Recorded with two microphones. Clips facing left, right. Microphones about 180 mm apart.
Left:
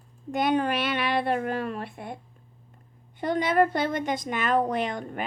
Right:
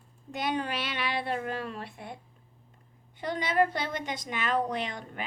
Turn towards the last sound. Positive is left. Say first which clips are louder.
# left 6 dB
turn(degrees=50)  # may be behind; listen again after turning